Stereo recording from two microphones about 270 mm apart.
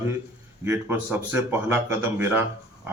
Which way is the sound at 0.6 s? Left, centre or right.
Centre.